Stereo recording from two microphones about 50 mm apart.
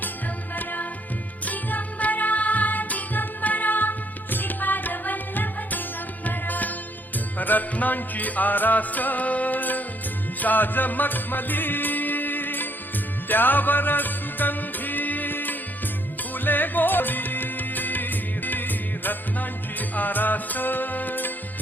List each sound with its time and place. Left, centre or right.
0.5 s music: left